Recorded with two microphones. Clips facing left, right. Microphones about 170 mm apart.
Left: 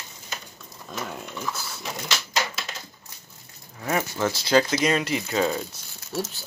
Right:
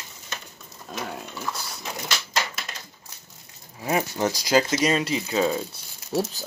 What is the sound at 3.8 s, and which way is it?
Speech, 20° right (ahead or behind).